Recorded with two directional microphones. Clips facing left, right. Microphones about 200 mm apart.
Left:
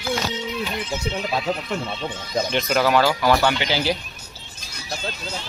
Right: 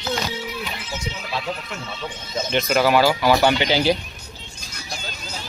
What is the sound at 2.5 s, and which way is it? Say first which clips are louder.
Speech: right 2 dB; 5° right (ahead or behind).